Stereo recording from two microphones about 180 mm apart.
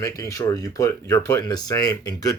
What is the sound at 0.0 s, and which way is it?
Speech, 15° left (ahead or behind).